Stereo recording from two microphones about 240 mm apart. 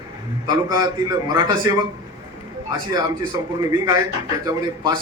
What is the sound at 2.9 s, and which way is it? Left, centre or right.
A man's voice, centre.